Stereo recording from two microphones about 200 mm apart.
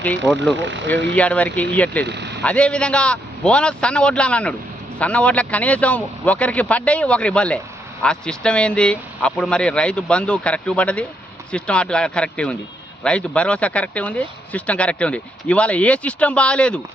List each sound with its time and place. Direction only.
0.5 s speech: 65° right (ahead or behind)
1.1 s speech: 5° left (ahead or behind)
2.0 s speech: 60° right (ahead or behind)
2.4 s speech: 5° left (ahead or behind)